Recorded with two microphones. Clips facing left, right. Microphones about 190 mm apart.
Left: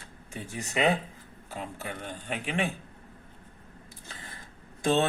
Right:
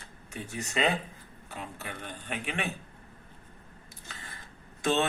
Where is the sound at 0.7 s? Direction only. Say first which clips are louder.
Left 3 dB; 20° left (ahead or behind).